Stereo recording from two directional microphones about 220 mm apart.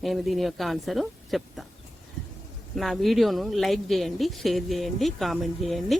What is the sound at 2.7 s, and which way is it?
Speech, centre (ahead or behind).